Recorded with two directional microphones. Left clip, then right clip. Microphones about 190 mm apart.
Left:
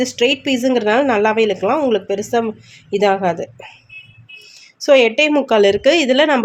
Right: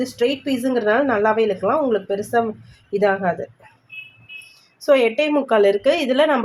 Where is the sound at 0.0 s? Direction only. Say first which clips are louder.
Left 5 dB; 45° left (ahead or behind).